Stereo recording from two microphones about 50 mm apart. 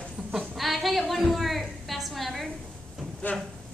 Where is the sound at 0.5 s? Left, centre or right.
Centre.